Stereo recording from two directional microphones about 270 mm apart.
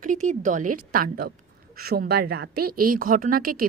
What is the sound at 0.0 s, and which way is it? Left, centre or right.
A woman's voice, right.